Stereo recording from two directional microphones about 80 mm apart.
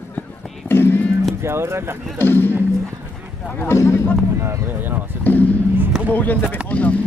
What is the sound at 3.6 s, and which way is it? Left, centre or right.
Speech, left.